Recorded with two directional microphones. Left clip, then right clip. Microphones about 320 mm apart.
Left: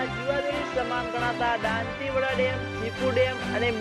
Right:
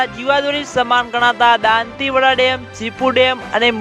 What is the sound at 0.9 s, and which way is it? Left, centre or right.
Speech, right.